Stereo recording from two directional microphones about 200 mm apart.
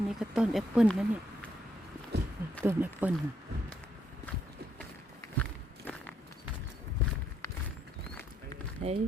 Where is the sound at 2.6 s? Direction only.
10° right (ahead or behind).